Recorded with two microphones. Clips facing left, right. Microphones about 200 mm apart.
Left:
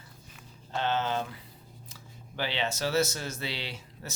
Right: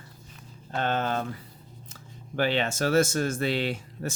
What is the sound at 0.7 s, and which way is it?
Speech, 55° right (ahead or behind).